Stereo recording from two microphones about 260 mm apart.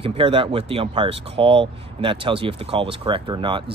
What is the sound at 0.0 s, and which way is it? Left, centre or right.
Speech, centre.